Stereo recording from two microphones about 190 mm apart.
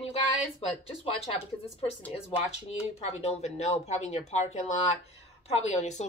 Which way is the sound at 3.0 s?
35° left (ahead or behind).